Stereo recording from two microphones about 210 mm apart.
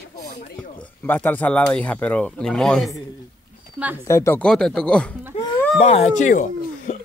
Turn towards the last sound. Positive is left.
turn(degrees=35)  # may be behind; listen again after turning